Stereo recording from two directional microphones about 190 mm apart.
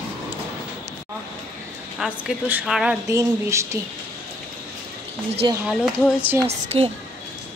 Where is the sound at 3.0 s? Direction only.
15° right (ahead or behind).